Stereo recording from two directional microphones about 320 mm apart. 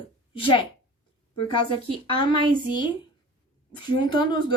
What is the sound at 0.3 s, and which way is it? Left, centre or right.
Speech, centre.